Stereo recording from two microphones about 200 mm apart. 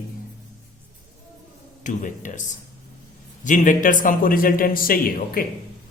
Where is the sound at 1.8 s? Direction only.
40° left (ahead or behind).